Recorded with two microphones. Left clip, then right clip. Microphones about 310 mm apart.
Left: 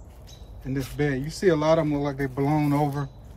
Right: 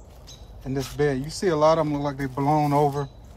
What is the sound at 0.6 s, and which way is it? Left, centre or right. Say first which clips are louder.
Speech: right 3 dB; centre.